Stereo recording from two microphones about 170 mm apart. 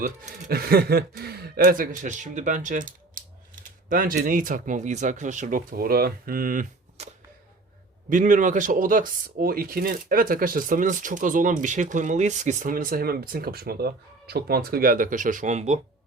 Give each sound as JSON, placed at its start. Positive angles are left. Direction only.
{"t": 0.0, "sound": "speech", "side_deg": -50}
{"t": 0.4, "sound": "speech", "side_deg": -65}
{"t": 8.1, "sound": "speech", "side_deg": -50}